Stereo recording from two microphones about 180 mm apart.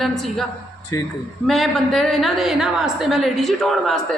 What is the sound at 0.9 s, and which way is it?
Speech, 20° left (ahead or behind).